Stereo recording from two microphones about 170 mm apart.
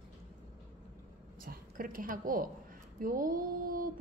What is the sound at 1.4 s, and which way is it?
A woman's voice, 55° right (ahead or behind).